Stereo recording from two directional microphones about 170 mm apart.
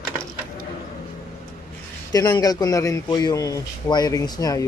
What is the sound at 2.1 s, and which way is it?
Speech, 20° left (ahead or behind).